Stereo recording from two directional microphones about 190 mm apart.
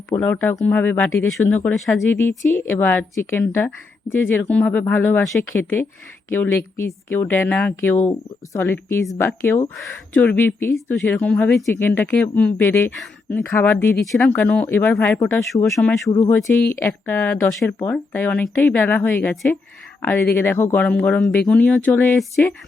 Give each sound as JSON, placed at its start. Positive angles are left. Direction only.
{"t": 0.2, "sound": "speech", "side_deg": 10}
{"t": 16.0, "sound": "speech", "side_deg": 20}